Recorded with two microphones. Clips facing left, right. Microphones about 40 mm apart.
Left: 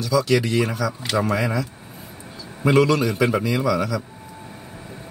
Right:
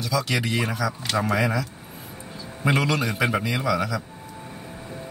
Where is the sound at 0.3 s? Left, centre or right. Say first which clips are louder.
Left 6 dB; centre.